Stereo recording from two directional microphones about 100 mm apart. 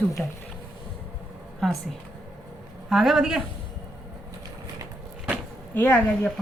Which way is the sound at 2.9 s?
5° right (ahead or behind).